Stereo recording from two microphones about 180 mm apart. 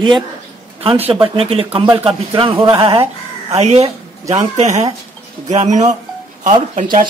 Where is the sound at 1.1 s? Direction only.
30° right (ahead or behind); by 7.1 s 45° right (ahead or behind).